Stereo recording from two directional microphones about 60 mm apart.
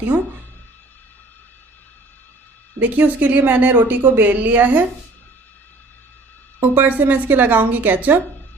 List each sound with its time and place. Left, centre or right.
2.8 s a woman's voice: right
6.6 s a woman's voice: right